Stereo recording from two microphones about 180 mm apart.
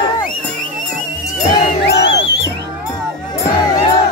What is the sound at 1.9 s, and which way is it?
Music, 70° left (ahead or behind).